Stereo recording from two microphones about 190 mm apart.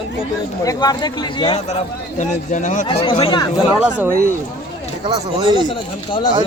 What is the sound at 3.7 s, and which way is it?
Speech, 10° right (ahead or behind).